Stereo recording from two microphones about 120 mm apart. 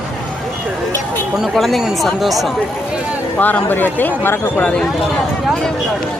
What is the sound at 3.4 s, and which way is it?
Speech, 15° left (ahead or behind).